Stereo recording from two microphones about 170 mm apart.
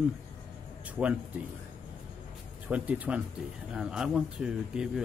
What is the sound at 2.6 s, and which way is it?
Speech, 10° right (ahead or behind).